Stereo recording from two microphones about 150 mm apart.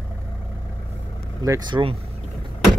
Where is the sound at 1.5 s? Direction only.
30° right (ahead or behind).